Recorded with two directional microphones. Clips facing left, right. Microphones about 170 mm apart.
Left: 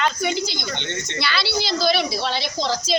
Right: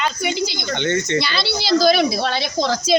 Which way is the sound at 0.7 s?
55° right (ahead or behind).